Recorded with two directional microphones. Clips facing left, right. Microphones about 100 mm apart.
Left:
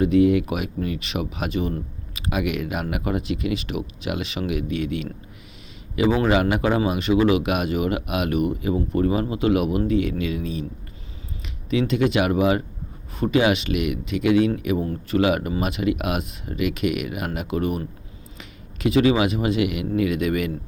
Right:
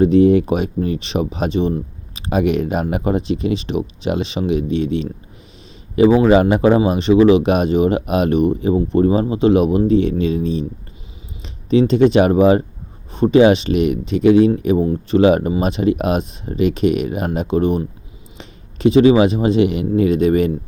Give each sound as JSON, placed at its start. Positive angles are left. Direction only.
{"t": 0.0, "sound": "speech", "side_deg": -30}
{"t": 6.2, "sound": "a man's voice", "side_deg": -30}